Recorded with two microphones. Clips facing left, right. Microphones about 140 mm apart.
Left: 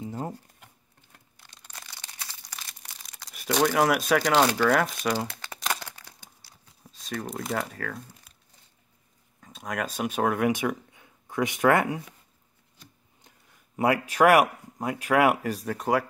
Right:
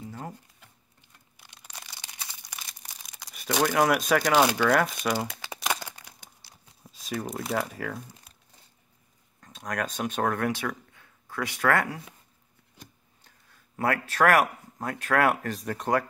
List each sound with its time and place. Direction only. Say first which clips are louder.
0.0 s a sound: left 5 dB; 30° left (ahead or behind)
1.3 s a sound: right 1 dB; 10° right (ahead or behind)
3.3 s speech: left 1 dB; centre (ahead or behind)
4.3 s speech: even; 10° right (ahead or behind)
4.6 s crumpling: even; centre (ahead or behind)
6.8 s speech: right 1 dB; 5° right (ahead or behind)
9.4 s speech: even; 5° left (ahead or behind)
13.2 s speech: left 2 dB; 15° left (ahead or behind)